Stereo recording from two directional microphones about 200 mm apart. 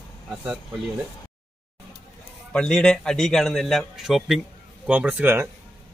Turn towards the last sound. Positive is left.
turn(degrees=-10)  # may be behind; listen again after turning